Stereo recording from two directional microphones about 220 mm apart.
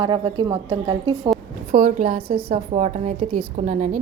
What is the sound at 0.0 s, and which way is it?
A woman's voice, 20° right (ahead or behind).